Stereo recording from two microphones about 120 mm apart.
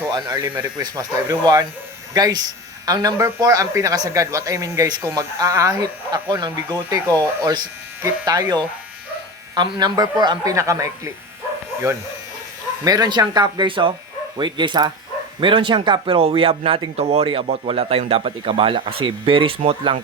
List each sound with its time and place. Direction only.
0.1 s speech: 25° right (ahead or behind)
0.6 s speech: 30° right (ahead or behind)
12.8 s speech: 30° right (ahead or behind); by 20.0 s 45° right (ahead or behind)